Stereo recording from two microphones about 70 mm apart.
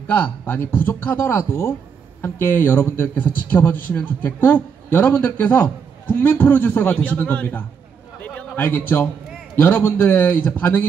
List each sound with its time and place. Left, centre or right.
0.1 s a man's voice: left
8.2 s a sound: left
9.6 s a man's voice: left